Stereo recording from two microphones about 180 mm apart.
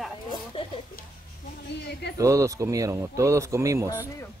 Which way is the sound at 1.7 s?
70° left (ahead or behind).